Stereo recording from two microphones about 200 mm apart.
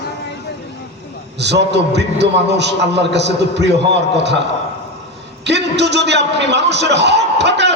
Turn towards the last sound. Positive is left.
turn(degrees=-60)  # may be behind; listen again after turning